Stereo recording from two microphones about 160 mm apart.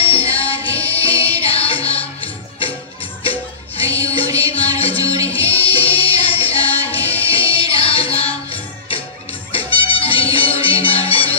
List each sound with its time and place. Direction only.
0.0 s music: 35° left (ahead or behind)
4.0 s music: 35° left (ahead or behind)
6.9 s music: 10° left (ahead or behind)
7.2 s music: 35° left (ahead or behind)